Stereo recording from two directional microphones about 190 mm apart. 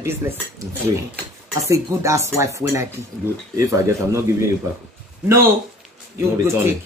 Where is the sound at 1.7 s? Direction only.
15° right (ahead or behind).